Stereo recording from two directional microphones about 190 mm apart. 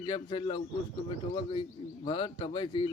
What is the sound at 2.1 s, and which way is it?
Speech, 25° left (ahead or behind).